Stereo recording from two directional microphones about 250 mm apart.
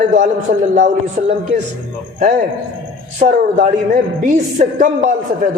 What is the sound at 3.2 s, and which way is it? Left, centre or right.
A woman's voice, right.